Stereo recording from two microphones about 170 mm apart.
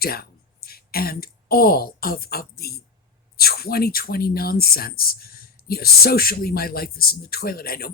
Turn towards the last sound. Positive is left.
turn(degrees=60)  # may be behind; listen again after turning